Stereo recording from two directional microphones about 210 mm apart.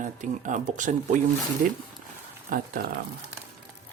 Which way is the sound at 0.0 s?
35° right (ahead or behind).